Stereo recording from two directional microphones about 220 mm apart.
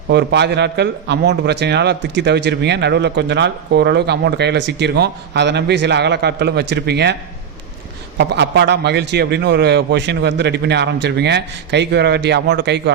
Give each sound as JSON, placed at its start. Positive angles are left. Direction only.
{"t": 0.1, "sound": "a man's voice", "side_deg": -50}
{"t": 8.2, "sound": "a man's voice", "side_deg": -50}